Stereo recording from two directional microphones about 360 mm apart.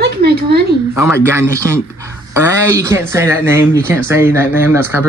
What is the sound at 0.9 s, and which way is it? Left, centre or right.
Speech, centre.